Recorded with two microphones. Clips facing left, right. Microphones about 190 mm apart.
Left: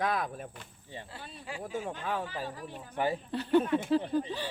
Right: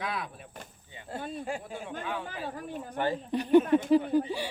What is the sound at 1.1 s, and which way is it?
Speech, 50° right (ahead or behind).